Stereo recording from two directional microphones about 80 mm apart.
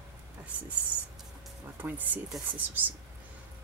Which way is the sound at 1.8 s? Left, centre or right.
Right.